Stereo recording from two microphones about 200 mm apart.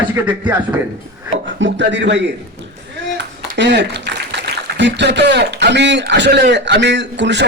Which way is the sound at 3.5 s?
60° right (ahead or behind).